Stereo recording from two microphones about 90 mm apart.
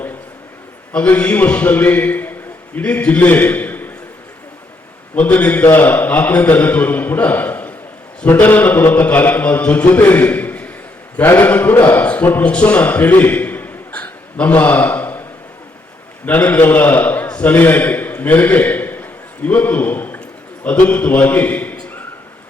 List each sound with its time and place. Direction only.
0.9 s a man's voice: 15° left (ahead or behind)
5.1 s a man's voice: 15° left (ahead or behind)
16.2 s a man's voice: 20° left (ahead or behind)